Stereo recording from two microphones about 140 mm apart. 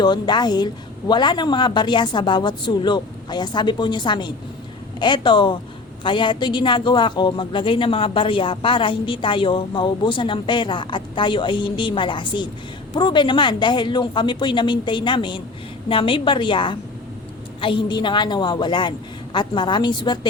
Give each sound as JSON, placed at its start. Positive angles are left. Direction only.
{"t": 0.0, "sound": "a man's voice", "side_deg": 30}